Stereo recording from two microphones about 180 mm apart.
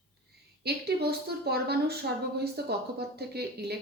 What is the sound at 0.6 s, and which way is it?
Speech, 65° right (ahead or behind).